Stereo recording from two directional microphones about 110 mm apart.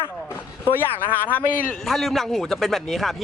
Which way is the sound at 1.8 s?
Centre (ahead or behind).